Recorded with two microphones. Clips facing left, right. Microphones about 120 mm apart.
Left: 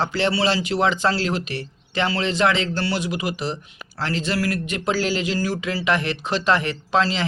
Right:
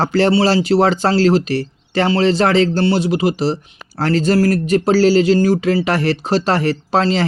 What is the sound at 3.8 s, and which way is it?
Speech, 45° right (ahead or behind).